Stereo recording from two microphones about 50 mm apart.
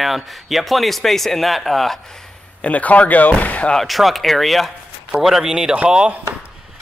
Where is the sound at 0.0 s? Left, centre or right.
Centre.